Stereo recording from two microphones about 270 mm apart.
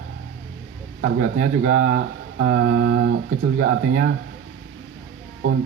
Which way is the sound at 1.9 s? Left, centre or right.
Right.